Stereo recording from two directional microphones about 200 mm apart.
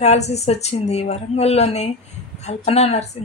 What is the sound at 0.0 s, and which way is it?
A woman's voice, 35° left (ahead or behind).